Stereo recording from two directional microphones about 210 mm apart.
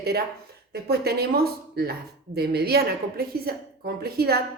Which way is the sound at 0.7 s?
50° right (ahead or behind).